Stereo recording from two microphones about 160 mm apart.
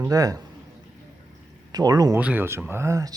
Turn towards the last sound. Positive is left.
turn(degrees=-20)  # may be behind; listen again after turning